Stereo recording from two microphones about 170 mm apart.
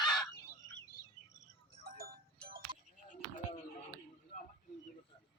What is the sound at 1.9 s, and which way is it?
Music, 60° right (ahead or behind).